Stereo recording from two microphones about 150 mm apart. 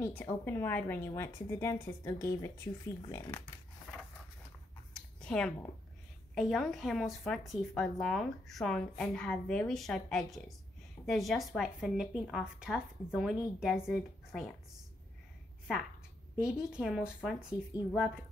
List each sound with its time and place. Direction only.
0.0 s a woman's voice: 10° left (ahead or behind)
4.9 s a sound: 5° left (ahead or behind)
6.3 s a woman's voice: centre (ahead or behind)
16.3 s a woman's voice: 5° right (ahead or behind)